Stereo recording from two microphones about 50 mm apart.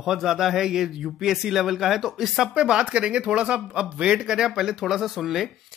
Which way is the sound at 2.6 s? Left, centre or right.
Centre.